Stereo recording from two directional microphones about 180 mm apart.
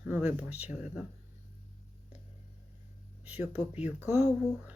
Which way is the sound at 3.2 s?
10° right (ahead or behind).